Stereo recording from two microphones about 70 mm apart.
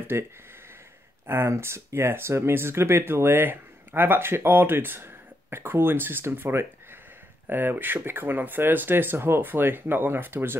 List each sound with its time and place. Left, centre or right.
0.1 s speech: right